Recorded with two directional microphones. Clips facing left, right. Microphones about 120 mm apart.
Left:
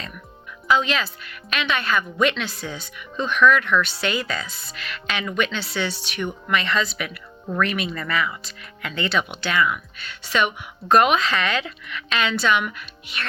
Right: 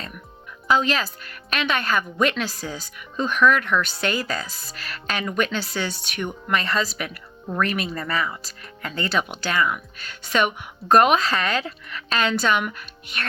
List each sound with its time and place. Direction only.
0.7 s speech: 40° right (ahead or behind)